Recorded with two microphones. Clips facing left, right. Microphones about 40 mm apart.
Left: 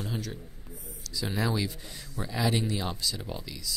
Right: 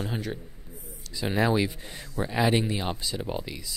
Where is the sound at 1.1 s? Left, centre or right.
Right.